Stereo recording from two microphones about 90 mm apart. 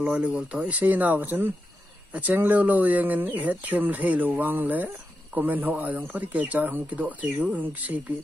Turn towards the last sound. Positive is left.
turn(degrees=-15)  # may be behind; listen again after turning